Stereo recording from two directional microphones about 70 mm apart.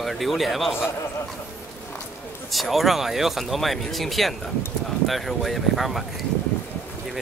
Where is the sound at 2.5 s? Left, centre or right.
Centre.